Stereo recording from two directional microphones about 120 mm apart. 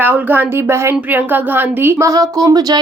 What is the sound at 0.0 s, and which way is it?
Speech, 15° right (ahead or behind).